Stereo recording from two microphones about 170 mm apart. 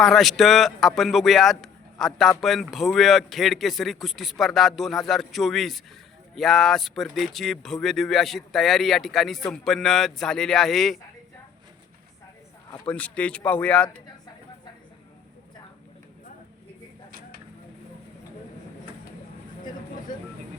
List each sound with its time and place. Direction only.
0.0 s speech: centre (ahead or behind)
12.9 s speech: 5° left (ahead or behind)
17.1 s a sound: 55° right (ahead or behind)